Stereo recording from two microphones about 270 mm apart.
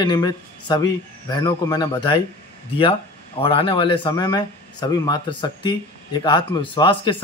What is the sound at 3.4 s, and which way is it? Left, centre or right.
Speech, centre.